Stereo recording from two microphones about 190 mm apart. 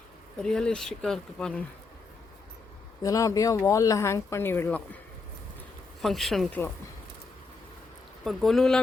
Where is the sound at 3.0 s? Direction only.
15° left (ahead or behind).